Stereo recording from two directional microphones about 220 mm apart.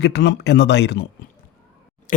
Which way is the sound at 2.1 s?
35° left (ahead or behind).